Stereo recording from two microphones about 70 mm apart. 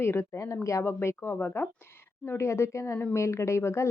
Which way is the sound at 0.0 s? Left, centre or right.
Left.